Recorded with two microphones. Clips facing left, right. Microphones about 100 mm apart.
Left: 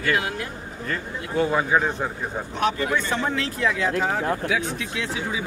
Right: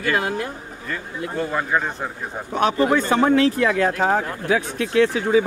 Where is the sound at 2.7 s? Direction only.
45° right (ahead or behind).